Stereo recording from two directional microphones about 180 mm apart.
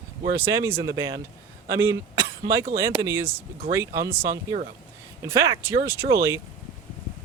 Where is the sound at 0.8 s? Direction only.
20° right (ahead or behind).